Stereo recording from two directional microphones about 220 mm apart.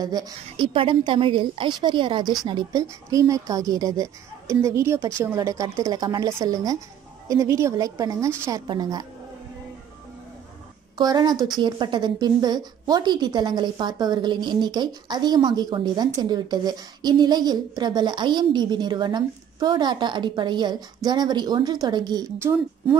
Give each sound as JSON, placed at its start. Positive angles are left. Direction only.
{"t": 0.0, "sound": "a woman's voice", "side_deg": -15}
{"t": 11.0, "sound": "a woman's voice", "side_deg": -20}